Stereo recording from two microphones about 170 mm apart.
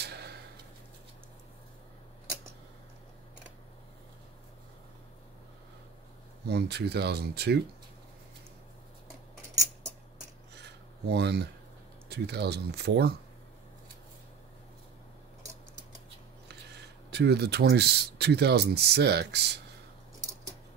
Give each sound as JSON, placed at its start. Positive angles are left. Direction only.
{"t": 0.0, "sound": "a sound", "side_deg": -75}
{"t": 6.4, "sound": "speech", "side_deg": -80}
{"t": 10.5, "sound": "filing", "side_deg": -80}
{"t": 12.1, "sound": "speech", "side_deg": -75}
{"t": 17.1, "sound": "speech", "side_deg": -75}